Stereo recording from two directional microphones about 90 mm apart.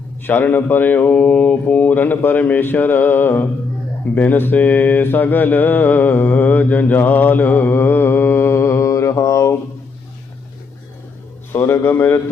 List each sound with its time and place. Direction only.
0.2 s speech: 20° left (ahead or behind)
11.5 s speech: 25° left (ahead or behind)